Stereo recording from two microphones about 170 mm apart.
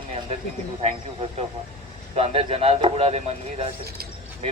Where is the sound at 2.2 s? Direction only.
35° right (ahead or behind).